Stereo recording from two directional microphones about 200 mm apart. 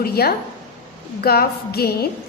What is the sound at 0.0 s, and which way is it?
A woman's voice, 50° left (ahead or behind).